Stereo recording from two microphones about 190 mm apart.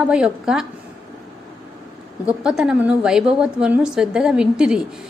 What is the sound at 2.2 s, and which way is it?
A woman's voice, 5° right (ahead or behind).